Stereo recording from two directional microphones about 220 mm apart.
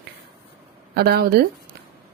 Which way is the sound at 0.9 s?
45° right (ahead or behind).